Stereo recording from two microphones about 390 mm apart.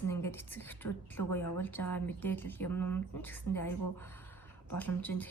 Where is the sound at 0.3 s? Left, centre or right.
Centre.